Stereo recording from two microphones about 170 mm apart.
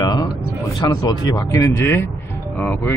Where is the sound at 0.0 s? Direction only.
25° left (ahead or behind).